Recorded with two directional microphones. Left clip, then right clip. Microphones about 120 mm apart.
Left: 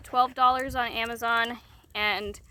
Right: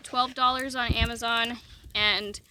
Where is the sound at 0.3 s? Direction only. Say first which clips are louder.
Left 2 dB; 50° right (ahead or behind).